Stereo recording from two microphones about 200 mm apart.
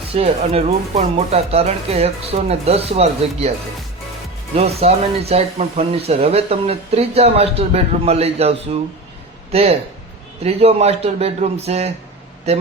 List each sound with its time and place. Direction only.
0.1 s speech: 30° right (ahead or behind)
4.5 s speech: 30° right (ahead or behind)